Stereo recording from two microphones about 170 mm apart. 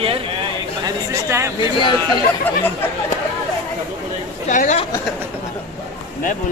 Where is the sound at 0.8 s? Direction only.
15° right (ahead or behind).